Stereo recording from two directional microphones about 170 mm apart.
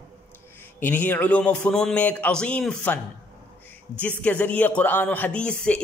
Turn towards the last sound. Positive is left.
turn(degrees=5)  # may be behind; listen again after turning